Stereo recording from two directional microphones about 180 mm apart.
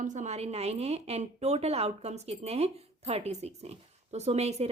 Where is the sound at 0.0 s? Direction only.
45° right (ahead or behind).